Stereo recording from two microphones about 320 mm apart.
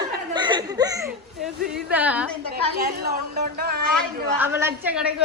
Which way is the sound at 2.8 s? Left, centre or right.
Right.